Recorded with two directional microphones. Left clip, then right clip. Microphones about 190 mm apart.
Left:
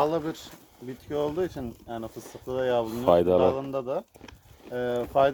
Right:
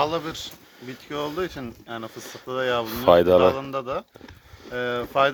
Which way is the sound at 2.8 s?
Centre (ahead or behind).